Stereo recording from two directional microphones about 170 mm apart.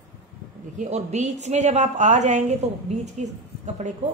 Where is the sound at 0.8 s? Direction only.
40° right (ahead or behind).